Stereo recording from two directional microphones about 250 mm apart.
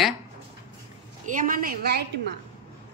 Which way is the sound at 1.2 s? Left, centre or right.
Right.